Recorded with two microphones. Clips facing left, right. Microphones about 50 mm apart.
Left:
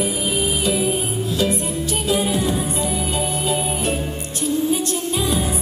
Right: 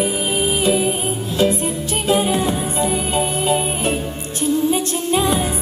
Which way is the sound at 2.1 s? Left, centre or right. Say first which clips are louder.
Right 3 dB; right.